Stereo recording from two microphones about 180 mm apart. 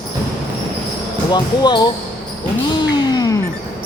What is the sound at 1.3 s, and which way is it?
Speech, 25° left (ahead or behind).